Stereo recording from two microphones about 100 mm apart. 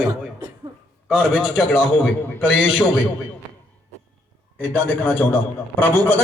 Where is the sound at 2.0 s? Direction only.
20° left (ahead or behind).